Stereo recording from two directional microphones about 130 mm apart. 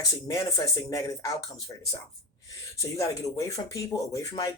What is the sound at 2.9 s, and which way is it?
Speech, 25° left (ahead or behind).